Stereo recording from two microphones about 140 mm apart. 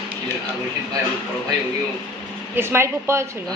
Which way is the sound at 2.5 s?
15° right (ahead or behind).